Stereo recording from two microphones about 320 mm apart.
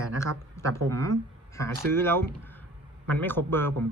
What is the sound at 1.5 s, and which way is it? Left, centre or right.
A man's voice, centre.